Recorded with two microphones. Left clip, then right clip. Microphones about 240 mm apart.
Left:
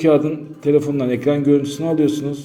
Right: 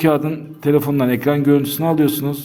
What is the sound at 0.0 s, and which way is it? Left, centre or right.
A man's voice, right.